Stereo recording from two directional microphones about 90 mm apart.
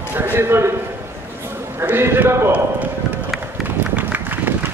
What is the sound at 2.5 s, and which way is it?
Run, 20° right (ahead or behind).